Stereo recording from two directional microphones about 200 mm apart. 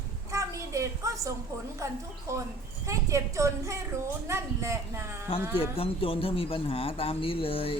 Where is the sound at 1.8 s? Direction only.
15° right (ahead or behind).